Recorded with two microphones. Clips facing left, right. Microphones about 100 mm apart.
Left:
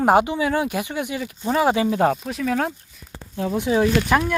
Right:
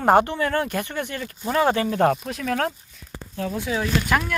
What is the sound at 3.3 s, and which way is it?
Speech, 25° left (ahead or behind).